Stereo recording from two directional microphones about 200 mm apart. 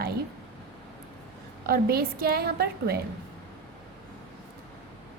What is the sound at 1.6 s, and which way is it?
A woman's voice, 50° right (ahead or behind).